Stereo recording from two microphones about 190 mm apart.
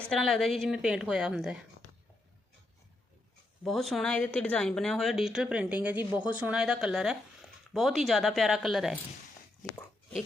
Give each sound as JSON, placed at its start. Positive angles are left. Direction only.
{"t": 0.1, "sound": "a woman's voice", "side_deg": 0}
{"t": 3.6, "sound": "a woman's voice", "side_deg": 0}